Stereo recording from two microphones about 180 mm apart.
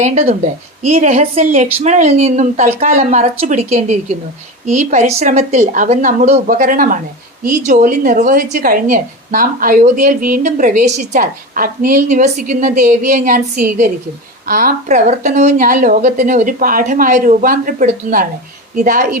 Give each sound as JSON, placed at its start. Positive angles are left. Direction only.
{"t": 0.0, "sound": "a woman's voice", "side_deg": -35}